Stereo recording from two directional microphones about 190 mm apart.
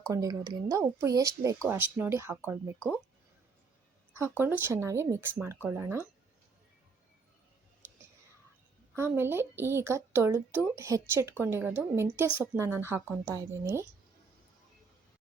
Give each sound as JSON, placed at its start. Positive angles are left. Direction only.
{"t": 0.1, "sound": "a woman's voice", "side_deg": -15}
{"t": 2.7, "sound": "speech", "side_deg": 5}
{"t": 4.1, "sound": "a woman's voice", "side_deg": -15}
{"t": 9.0, "sound": "a woman's voice", "side_deg": -10}